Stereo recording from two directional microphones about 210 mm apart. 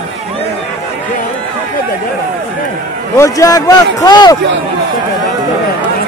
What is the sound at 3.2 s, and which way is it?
A man's voice, 15° left (ahead or behind).